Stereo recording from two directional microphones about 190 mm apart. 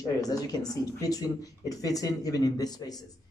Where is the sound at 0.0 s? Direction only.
20° left (ahead or behind).